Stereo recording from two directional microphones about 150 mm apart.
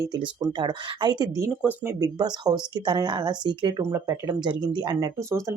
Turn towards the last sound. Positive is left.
turn(degrees=-20)  # may be behind; listen again after turning